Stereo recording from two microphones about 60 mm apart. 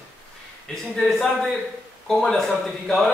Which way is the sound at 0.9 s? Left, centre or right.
Centre.